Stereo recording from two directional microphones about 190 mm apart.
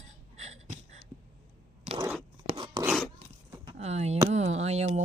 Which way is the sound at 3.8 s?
35° right (ahead or behind).